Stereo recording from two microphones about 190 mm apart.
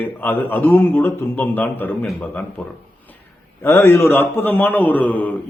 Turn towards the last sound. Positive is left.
turn(degrees=10)  # may be behind; listen again after turning